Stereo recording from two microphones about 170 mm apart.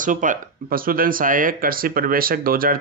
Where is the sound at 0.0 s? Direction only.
50° right (ahead or behind).